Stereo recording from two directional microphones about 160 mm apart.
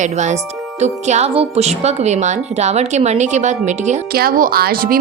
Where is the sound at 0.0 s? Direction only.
45° right (ahead or behind).